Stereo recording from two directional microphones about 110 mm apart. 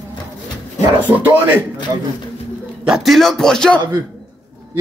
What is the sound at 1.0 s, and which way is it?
Speech, 15° right (ahead or behind).